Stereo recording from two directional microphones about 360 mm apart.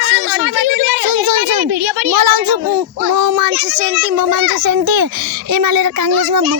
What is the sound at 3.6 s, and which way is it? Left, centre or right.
Child singing, right.